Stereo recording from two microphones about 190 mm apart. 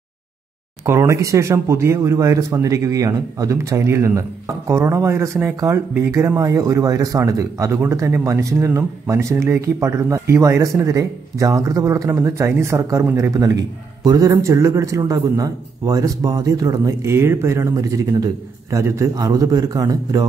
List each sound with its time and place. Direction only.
0.8 s speech: 15° right (ahead or behind)